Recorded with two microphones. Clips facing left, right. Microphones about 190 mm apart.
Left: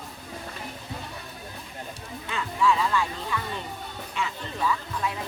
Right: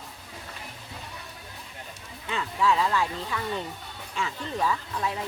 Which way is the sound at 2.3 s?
30° right (ahead or behind).